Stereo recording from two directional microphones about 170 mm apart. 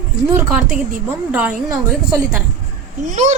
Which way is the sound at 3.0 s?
45° right (ahead or behind).